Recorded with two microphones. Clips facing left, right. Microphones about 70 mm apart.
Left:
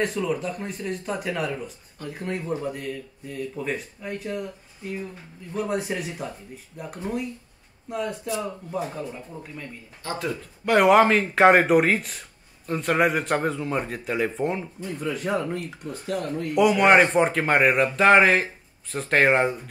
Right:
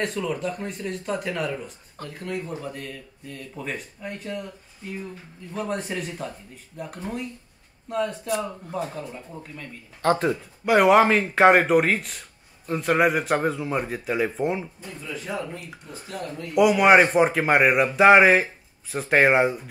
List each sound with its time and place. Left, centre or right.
0.0 s speech: centre
2.2 s speech: left
2.6 s speech: centre
5.5 s speech: centre
10.0 s speech: right
10.6 s speech: centre
15.0 s speech: left
15.7 s a man's voice: centre